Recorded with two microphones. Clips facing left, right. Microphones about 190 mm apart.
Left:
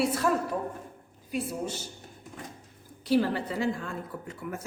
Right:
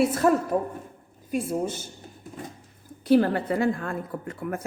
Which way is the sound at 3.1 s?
55° right (ahead or behind).